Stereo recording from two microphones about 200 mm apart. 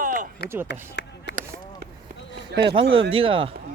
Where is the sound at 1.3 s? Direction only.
60° left (ahead or behind).